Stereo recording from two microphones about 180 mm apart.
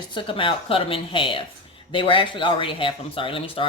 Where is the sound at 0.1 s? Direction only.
30° left (ahead or behind).